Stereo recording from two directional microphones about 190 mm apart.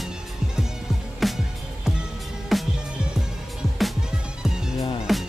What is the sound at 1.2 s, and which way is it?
Music, centre (ahead or behind).